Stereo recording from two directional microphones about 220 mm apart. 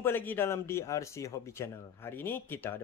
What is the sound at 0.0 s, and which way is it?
Speech, 10° left (ahead or behind).